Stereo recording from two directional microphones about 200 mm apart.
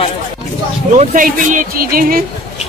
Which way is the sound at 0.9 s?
40° right (ahead or behind).